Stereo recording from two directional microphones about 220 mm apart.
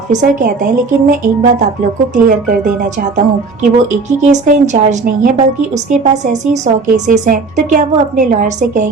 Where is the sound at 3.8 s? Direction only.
35° right (ahead or behind).